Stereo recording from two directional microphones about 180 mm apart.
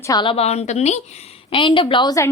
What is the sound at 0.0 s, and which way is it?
A woman's voice, 20° left (ahead or behind).